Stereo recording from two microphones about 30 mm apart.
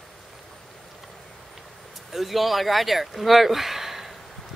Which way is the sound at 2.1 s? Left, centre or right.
Centre.